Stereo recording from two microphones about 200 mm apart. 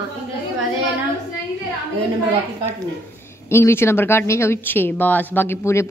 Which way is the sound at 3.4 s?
15° left (ahead or behind).